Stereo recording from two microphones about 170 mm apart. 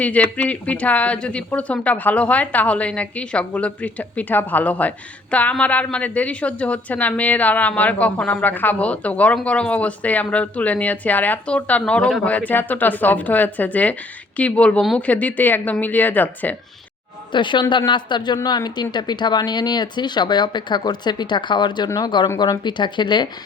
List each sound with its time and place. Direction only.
0.0 s speech: 10° left (ahead or behind)
17.3 s speech: 25° left (ahead or behind)